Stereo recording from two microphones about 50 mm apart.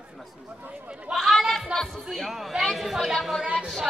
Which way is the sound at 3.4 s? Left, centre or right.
Right.